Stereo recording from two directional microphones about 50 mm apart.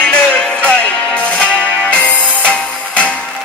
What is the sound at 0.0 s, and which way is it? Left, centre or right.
Music, left.